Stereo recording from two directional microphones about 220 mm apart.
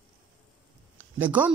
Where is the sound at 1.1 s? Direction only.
5° right (ahead or behind).